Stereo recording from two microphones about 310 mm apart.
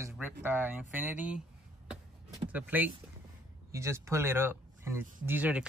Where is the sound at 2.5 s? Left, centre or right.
Centre.